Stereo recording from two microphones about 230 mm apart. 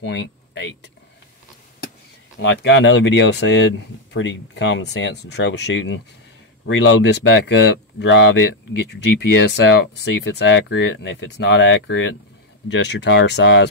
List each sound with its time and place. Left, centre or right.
0.0 s speech: left
2.3 s speech: left